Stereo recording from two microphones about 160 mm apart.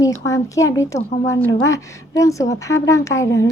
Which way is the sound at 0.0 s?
20° left (ahead or behind).